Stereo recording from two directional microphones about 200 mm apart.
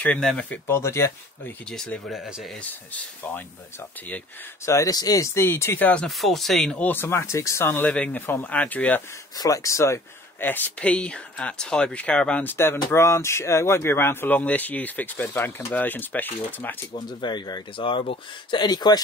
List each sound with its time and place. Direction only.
0.0 s speech: 5° left (ahead or behind)
4.6 s speech: 15° left (ahead or behind)
16.9 s speech: 20° left (ahead or behind)